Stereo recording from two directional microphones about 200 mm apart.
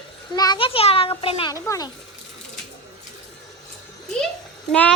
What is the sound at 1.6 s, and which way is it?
Speech, 15° left (ahead or behind).